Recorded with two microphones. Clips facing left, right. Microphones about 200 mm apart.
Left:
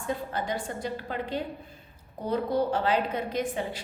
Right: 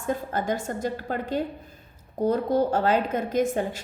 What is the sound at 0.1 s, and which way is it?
A woman's voice, 45° right (ahead or behind).